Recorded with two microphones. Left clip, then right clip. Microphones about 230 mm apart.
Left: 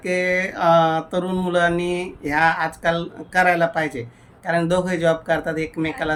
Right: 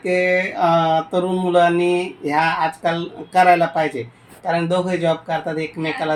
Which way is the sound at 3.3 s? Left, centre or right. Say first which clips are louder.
Right 4 dB; left.